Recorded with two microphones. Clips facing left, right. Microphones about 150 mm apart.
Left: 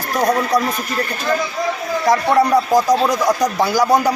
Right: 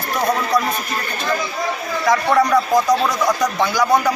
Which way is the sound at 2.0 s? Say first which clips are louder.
Left 1 dB; 30° left (ahead or behind).